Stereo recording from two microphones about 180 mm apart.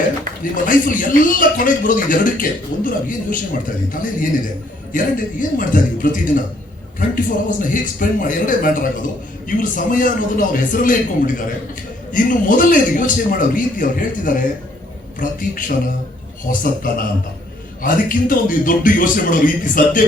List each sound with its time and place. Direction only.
0.5 s a man's voice: 50° left (ahead or behind)
12.1 s a man's voice: 45° left (ahead or behind)